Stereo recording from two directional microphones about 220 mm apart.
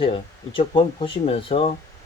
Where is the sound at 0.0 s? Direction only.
25° left (ahead or behind).